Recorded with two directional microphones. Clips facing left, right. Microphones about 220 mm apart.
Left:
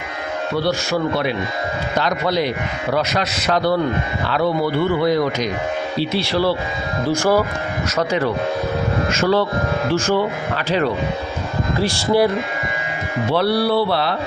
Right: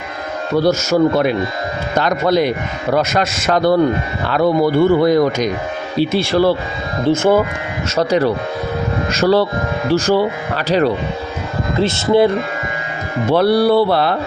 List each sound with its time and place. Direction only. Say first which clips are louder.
0.5 s speech: right 7 dB; 45° right (ahead or behind)
7.0 s speech: right 4 dB; 25° right (ahead or behind)
7.9 s speech: right 5 dB; 35° right (ahead or behind)
11.8 s speech: right 4 dB; 20° right (ahead or behind)
13.3 s speech: right 5 dB; 45° right (ahead or behind)